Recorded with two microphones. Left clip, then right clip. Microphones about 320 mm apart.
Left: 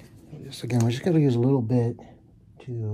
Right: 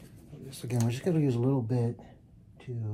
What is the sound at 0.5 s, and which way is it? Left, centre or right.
Speech, left.